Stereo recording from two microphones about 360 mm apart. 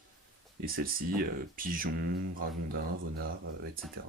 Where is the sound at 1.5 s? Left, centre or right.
Right.